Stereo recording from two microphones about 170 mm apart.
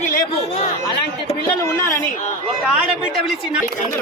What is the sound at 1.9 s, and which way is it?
Speech, 50° left (ahead or behind).